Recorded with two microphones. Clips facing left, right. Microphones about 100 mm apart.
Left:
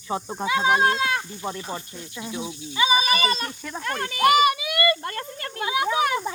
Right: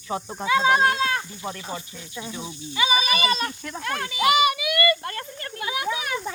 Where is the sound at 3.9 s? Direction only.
50° left (ahead or behind).